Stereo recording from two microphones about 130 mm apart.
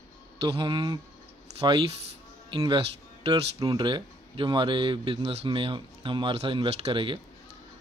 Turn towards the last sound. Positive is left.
turn(degrees=-40)  # may be behind; listen again after turning